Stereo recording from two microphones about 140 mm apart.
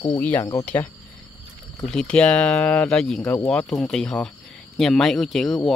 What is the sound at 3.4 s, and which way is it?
Speech, 5° left (ahead or behind).